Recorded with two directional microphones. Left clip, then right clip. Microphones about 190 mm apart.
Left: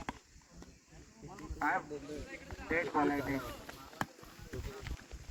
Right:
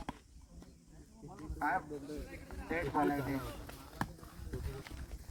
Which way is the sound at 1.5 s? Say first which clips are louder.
Left 1 dB; 45° right (ahead or behind).